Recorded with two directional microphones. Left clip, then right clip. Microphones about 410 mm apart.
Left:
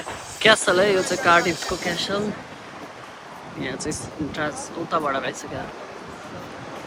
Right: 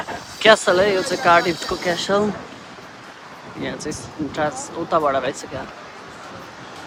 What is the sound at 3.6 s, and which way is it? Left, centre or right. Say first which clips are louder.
Speech: right 1 dB; centre.